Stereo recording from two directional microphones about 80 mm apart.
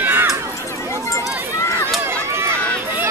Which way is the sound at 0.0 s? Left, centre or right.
Right.